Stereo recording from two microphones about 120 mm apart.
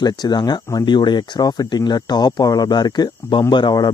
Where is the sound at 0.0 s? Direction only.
35° left (ahead or behind).